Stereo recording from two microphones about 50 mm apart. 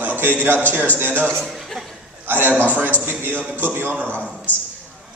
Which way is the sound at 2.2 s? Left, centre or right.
Right.